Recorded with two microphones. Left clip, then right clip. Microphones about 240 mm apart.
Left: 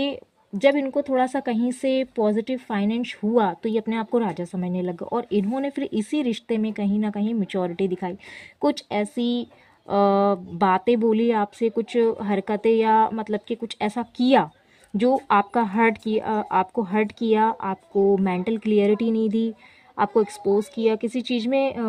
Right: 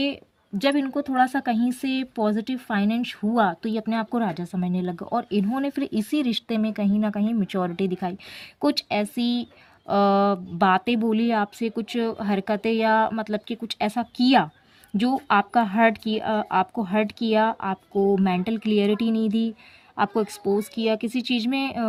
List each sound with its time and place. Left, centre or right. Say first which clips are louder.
0.5 s speech: left 4 dB; right